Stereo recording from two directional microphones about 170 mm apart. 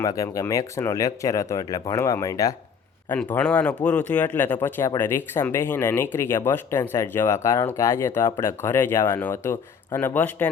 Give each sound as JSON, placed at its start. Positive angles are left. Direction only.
{"t": 0.0, "sound": "speech", "side_deg": 20}
{"t": 3.1, "sound": "speech", "side_deg": 10}